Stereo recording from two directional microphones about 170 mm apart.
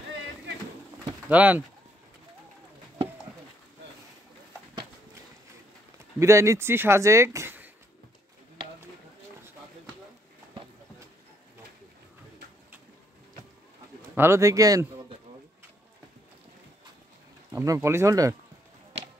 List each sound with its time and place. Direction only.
1.3 s speech: 10° right (ahead or behind)
6.1 s speech: 15° right (ahead or behind)
14.1 s speech: 15° right (ahead or behind)
17.5 s speech: 15° right (ahead or behind)